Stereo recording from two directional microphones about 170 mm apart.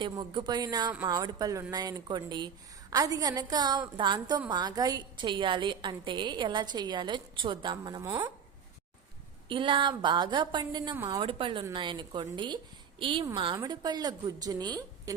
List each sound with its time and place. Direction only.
0.0 s a woman's voice: 25° right (ahead or behind)
9.5 s a woman's voice: 30° right (ahead or behind)
11.2 s a woman's voice: 30° right (ahead or behind)